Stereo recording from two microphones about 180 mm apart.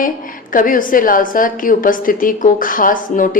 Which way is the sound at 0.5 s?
50° left (ahead or behind).